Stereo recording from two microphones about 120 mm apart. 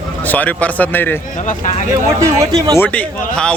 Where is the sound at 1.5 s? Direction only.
80° left.